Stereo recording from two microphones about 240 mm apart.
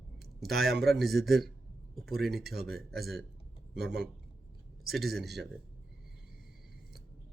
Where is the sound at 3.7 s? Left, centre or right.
Right.